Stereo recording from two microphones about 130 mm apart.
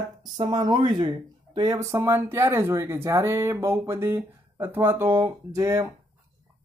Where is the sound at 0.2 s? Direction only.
30° right (ahead or behind).